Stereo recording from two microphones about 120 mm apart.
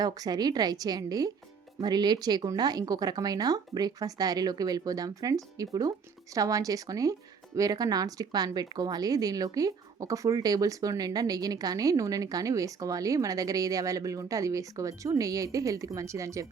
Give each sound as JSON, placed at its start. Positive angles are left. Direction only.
{"t": 0.0, "sound": "speech", "side_deg": -30}